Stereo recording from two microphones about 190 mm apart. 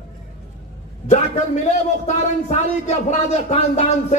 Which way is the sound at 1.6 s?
35° left (ahead or behind).